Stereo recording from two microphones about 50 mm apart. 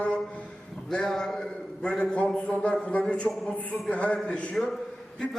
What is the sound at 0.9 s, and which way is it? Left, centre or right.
A man's voice, centre.